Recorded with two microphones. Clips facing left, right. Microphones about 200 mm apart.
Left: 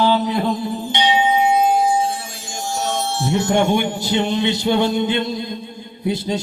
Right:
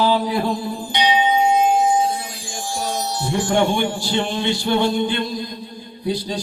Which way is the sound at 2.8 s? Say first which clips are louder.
Left 2 dB; 25° left (ahead or behind).